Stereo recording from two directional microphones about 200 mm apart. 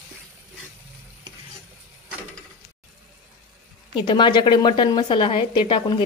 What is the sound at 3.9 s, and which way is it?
A woman's voice, 25° left (ahead or behind).